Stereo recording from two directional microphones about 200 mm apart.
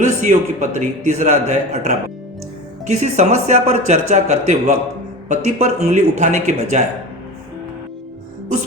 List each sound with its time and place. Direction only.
0.0 s a man's voice: 40° right (ahead or behind)